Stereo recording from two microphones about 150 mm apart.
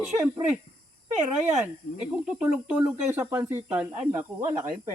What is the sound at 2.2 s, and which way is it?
Speech, 10° right (ahead or behind).